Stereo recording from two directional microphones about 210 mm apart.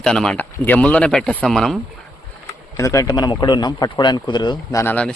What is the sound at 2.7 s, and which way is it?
Speech, 15° left (ahead or behind).